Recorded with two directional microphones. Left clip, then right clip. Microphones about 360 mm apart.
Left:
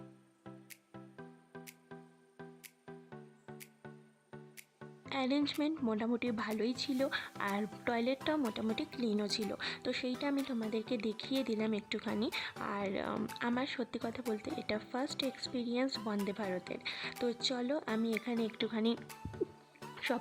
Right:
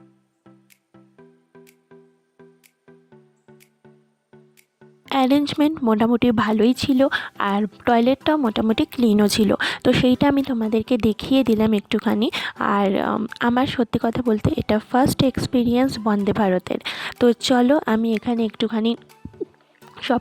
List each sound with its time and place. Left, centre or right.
1.1 s music: centre
5.0 s a woman's voice: right
19.8 s a sound: centre